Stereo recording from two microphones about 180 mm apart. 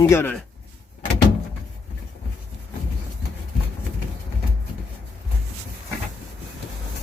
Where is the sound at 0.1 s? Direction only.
10° left (ahead or behind).